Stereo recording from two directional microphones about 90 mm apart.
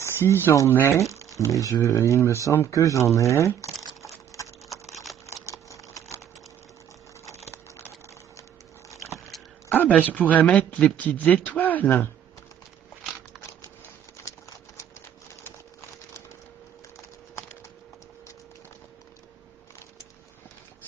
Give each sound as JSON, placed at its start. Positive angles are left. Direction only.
{"t": 0.0, "sound": "speech", "side_deg": 25}
{"t": 4.0, "sound": "typing", "side_deg": 35}
{"t": 5.2, "sound": "a sound", "side_deg": 35}
{"t": 7.2, "sound": "a sound", "side_deg": 30}
{"t": 9.7, "sound": "speech", "side_deg": 20}
{"t": 14.8, "sound": "typewriter", "side_deg": 30}